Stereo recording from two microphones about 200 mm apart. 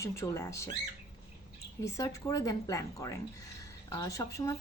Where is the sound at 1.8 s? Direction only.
15° left (ahead or behind).